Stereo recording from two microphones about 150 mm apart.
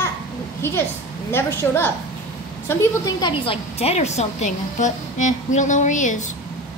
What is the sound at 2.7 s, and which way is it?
A woman's voice, 25° left (ahead or behind).